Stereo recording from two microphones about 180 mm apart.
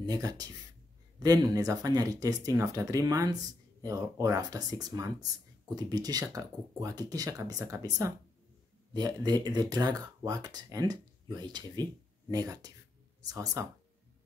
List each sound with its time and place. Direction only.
0.0 s speech: 20° right (ahead or behind)